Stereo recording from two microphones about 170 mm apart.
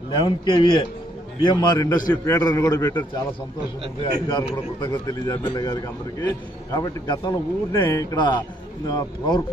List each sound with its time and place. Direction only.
0.2 s a man's voice: 30° left (ahead or behind)
4.3 s a man's voice: 25° left (ahead or behind)